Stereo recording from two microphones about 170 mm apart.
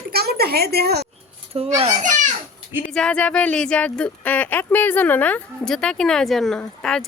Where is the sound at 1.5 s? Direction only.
35° right (ahead or behind).